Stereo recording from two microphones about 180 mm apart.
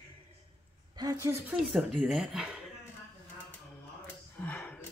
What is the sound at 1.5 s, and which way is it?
Speech, 5° right (ahead or behind).